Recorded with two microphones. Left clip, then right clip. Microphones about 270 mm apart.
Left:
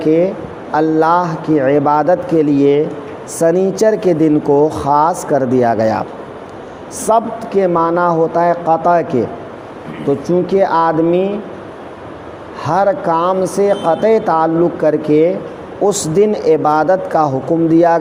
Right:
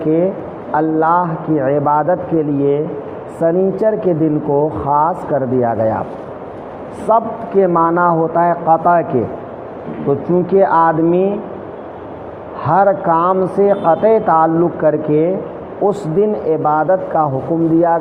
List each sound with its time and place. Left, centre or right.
0.0 s a man's voice: left
7.1 s speech: left
10.1 s speech: left
12.6 s speech: left